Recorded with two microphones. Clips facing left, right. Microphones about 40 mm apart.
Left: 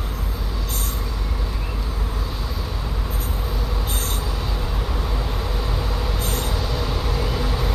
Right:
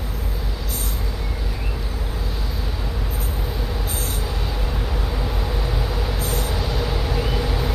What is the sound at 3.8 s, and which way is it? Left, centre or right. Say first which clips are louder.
Train: left 1 dB; left.